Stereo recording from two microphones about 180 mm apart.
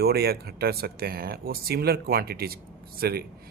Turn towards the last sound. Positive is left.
turn(degrees=-60)  # may be behind; listen again after turning